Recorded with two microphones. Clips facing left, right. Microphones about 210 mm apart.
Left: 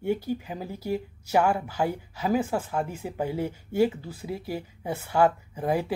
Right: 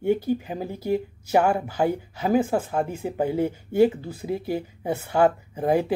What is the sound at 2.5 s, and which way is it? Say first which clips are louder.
Speech: right 4 dB; 40° right (ahead or behind).